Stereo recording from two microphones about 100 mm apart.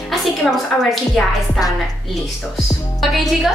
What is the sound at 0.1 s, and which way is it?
A woman's voice, 5° left (ahead or behind).